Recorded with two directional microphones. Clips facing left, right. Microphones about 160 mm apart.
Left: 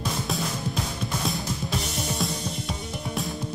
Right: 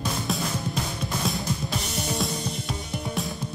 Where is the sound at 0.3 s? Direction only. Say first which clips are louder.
Right 1 dB; centre (ahead or behind).